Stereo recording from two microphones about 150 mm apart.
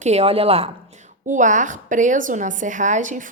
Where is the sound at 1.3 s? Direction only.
55° right (ahead or behind).